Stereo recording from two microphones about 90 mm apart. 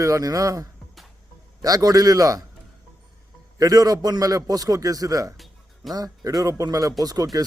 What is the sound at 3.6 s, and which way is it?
Speech, 45° right (ahead or behind).